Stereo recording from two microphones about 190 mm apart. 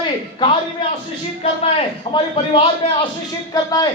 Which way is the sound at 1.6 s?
30° left (ahead or behind).